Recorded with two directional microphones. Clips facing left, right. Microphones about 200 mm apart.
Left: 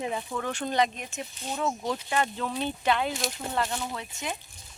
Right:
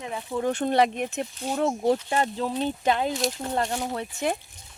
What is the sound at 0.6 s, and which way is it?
Speech, 55° right (ahead or behind).